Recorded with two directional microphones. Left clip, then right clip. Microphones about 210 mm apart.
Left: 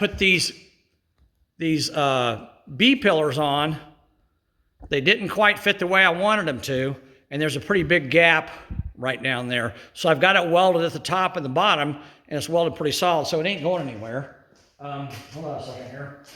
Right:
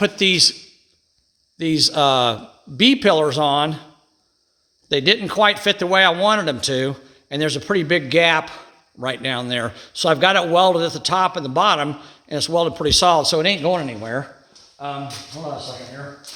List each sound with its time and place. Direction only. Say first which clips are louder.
0.0 s speech: right 4 dB; 25° right (ahead or behind)
1.5 s speech: right 6 dB; 20° right (ahead or behind)
4.9 s a man's voice: right 3 dB; 15° right (ahead or behind); by 14.3 s 40° right (ahead or behind)
14.8 s speech: right 6 dB; 55° right (ahead or behind)